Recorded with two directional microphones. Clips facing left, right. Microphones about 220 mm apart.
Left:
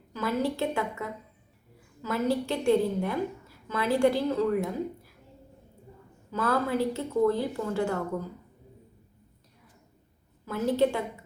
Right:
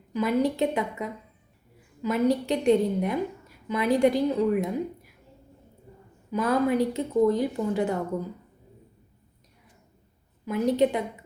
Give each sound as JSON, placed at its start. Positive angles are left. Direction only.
{"t": 0.1, "sound": "a woman's voice", "side_deg": -15}
{"t": 6.3, "sound": "a woman's voice", "side_deg": -15}
{"t": 10.4, "sound": "a woman's voice", "side_deg": -15}